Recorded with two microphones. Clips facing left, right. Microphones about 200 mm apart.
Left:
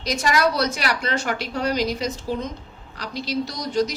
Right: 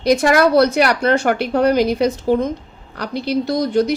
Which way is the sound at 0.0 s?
55° right (ahead or behind).